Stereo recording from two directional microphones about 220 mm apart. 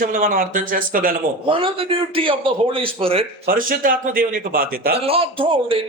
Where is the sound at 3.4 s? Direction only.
40° right (ahead or behind).